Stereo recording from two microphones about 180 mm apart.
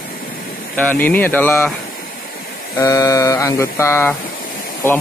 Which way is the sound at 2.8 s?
20° left (ahead or behind).